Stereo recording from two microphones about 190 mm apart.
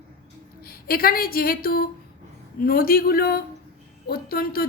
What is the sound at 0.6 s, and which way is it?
A woman's voice, 50° left (ahead or behind).